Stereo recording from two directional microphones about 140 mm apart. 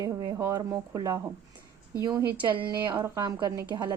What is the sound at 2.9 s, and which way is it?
A woman's voice, 20° right (ahead or behind).